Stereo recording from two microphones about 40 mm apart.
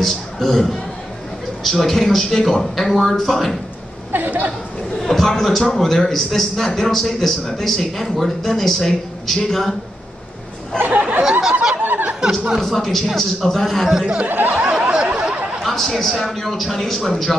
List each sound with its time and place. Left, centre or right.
0.0 s a man's voice: centre
4.1 s speech: right
5.0 s a man's voice: centre
10.9 s a sound: right
11.7 s a sound: right
12.5 s a man's voice: centre
13.8 s speech: centre
14.2 s snicker: right
14.5 s snicker: right
15.0 s a sound: right
15.6 s a man's voice: centre